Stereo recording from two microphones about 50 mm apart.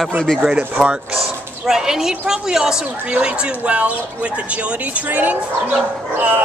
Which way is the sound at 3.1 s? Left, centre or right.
Right.